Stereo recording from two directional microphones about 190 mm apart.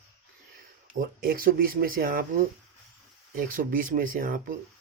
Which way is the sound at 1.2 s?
50° right (ahead or behind).